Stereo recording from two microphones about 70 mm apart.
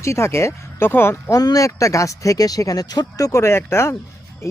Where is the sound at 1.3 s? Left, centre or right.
Left.